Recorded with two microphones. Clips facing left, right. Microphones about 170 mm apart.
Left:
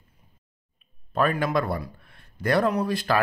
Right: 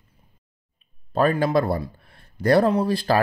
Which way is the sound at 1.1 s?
35° right (ahead or behind).